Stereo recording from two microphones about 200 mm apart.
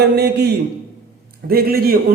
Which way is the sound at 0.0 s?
55° right (ahead or behind).